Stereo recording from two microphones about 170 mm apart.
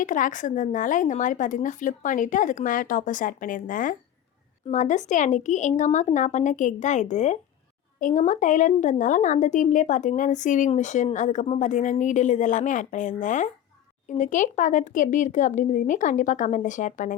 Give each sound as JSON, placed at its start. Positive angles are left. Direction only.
{"t": 0.0, "sound": "a woman's voice", "side_deg": 50}